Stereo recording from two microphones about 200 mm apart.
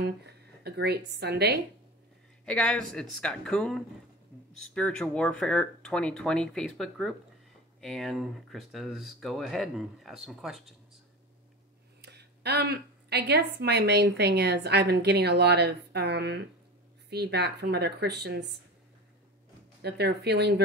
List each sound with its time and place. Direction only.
0.0 s a woman's voice: 55° right (ahead or behind)
2.4 s speech: 5° left (ahead or behind)
12.0 s a woman's voice: 55° right (ahead or behind)
19.8 s a woman's voice: 55° right (ahead or behind)